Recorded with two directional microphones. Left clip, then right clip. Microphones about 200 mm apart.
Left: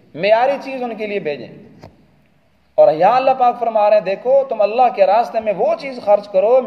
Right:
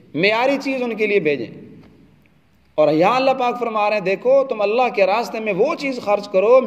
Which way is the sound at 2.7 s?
40° right (ahead or behind).